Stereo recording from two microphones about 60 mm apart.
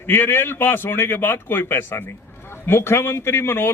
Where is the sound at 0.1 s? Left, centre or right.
Left.